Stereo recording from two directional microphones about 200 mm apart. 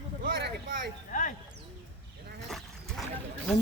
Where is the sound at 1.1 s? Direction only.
40° left (ahead or behind).